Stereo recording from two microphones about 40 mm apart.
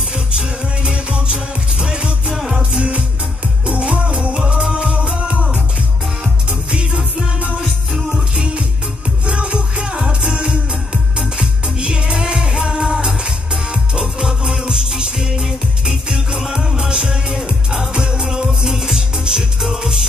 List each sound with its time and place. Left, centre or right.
0.1 s music: right
3.6 s music: right
7.6 s music: centre
9.2 s music: right
9.9 s music: centre
11.8 s music: centre